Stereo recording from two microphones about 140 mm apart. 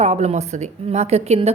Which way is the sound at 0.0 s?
50° right (ahead or behind).